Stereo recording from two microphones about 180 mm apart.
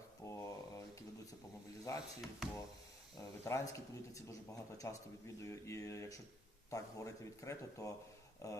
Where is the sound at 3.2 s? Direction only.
15° left (ahead or behind).